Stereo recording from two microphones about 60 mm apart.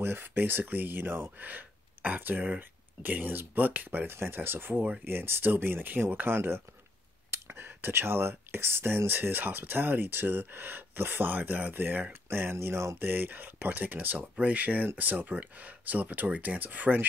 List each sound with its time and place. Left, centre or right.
0.0 s speech: right
13.0 s speech: right